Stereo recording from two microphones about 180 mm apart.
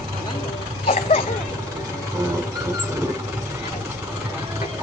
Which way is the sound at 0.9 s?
35° left (ahead or behind).